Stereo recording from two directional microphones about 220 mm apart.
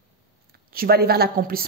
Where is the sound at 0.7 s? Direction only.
45° right (ahead or behind).